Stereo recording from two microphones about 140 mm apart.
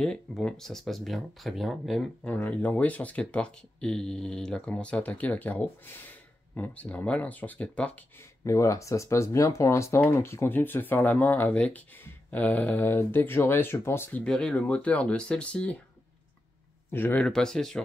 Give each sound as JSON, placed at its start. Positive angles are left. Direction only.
{"t": 0.0, "sound": "speech", "side_deg": 5}
{"t": 8.5, "sound": "speech", "side_deg": 20}
{"t": 14.2, "sound": "speech", "side_deg": 5}
{"t": 16.9, "sound": "speech", "side_deg": 15}